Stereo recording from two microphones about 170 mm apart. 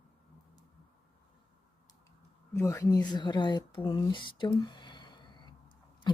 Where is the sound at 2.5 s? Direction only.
15° left (ahead or behind).